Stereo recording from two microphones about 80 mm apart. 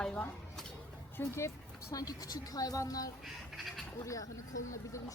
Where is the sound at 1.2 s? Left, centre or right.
Left.